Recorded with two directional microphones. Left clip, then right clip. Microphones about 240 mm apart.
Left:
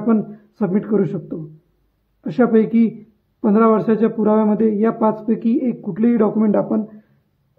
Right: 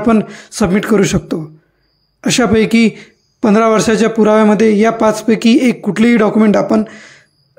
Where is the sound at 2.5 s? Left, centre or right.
Right.